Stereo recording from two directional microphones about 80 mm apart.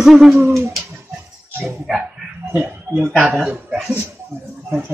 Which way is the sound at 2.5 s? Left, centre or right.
Right.